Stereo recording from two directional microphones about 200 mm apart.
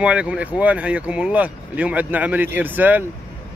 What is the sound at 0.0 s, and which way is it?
Speech, 5° right (ahead or behind).